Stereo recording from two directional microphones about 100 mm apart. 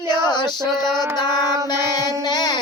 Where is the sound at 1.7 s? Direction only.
45° left (ahead or behind).